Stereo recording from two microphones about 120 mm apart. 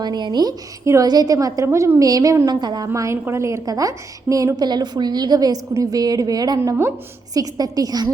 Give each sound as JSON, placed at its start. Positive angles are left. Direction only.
{"t": 0.0, "sound": "a woman's voice", "side_deg": -35}
{"t": 6.6, "sound": "a woman's voice", "side_deg": -20}
{"t": 7.3, "sound": "a woman's voice", "side_deg": -30}